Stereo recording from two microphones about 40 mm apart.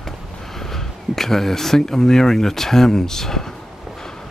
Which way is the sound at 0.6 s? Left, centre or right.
Centre.